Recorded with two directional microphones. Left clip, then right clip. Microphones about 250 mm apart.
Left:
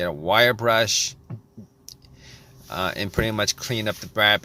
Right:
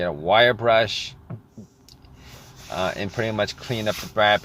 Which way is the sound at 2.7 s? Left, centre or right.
Left.